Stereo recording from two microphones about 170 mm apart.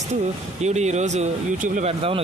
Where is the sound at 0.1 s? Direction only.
40° right (ahead or behind).